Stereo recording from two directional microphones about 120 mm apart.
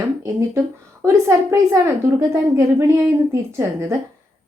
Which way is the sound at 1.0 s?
25° right (ahead or behind).